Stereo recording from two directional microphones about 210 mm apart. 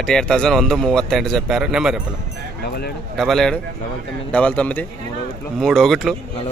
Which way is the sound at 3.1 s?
Centre (ahead or behind).